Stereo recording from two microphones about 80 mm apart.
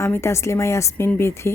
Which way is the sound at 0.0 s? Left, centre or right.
Left.